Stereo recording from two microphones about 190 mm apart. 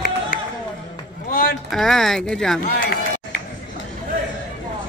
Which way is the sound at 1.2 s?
50° left (ahead or behind).